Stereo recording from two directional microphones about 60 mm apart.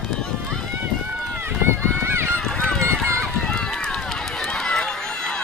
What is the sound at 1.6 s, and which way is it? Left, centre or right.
Run, right.